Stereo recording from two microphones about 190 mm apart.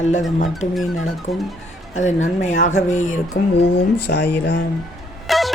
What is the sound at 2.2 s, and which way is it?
Speech, 40° left (ahead or behind).